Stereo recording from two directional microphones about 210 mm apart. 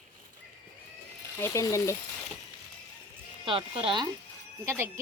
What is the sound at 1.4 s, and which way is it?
Speech, 15° left (ahead or behind).